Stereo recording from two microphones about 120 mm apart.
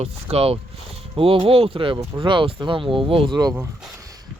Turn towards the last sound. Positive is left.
turn(degrees=-45)  # may be behind; listen again after turning